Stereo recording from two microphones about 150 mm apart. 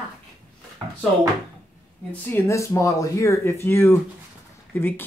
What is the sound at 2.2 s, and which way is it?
Speech, 15° left (ahead or behind).